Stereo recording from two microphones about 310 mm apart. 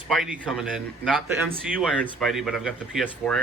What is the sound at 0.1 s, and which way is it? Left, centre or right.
Speech, centre.